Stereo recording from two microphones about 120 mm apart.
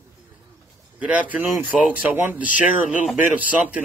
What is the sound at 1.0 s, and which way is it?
Speech, 10° right (ahead or behind).